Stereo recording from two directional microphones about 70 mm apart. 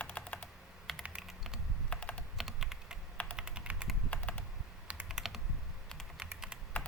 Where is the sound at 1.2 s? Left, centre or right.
Centre.